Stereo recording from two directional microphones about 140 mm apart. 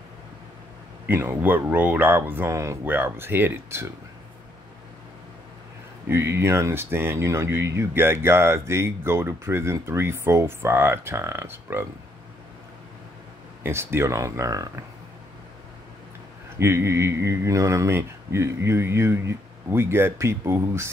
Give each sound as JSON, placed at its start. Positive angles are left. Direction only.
{"t": 1.0, "sound": "speech", "side_deg": -15}
{"t": 6.0, "sound": "speech", "side_deg": -20}
{"t": 13.6, "sound": "speech", "side_deg": -15}
{"t": 16.5, "sound": "speech", "side_deg": -20}